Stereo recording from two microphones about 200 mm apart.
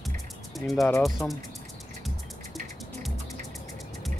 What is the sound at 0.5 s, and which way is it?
Speech, centre (ahead or behind).